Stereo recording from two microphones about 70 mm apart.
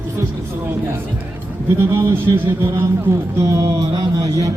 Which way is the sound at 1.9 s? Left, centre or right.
Right.